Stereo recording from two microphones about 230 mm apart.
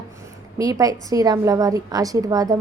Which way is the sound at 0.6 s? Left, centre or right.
Centre.